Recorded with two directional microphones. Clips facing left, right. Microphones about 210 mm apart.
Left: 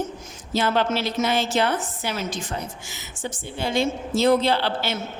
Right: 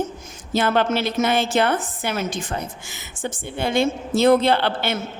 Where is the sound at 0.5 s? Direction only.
55° right (ahead or behind).